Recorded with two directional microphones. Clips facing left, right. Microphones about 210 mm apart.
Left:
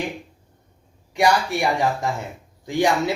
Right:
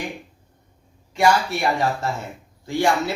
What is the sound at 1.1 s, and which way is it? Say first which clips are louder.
Speech: even; 15° left (ahead or behind).